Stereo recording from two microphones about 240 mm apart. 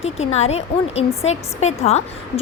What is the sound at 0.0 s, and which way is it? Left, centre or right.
A woman's voice, left.